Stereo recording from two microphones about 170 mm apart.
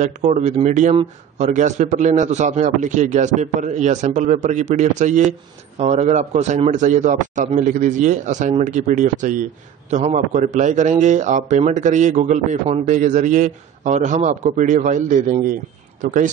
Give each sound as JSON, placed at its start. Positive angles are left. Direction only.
{"t": 0.0, "sound": "a man's voice", "side_deg": -40}